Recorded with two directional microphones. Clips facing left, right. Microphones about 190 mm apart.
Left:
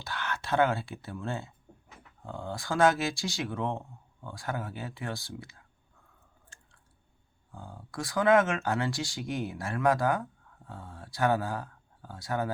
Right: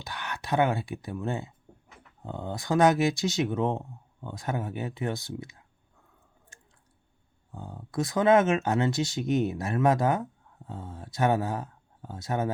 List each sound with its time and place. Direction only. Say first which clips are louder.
0.0 s speech: left 1 dB; 15° right (ahead or behind)
7.5 s speech: right 7 dB; 20° right (ahead or behind)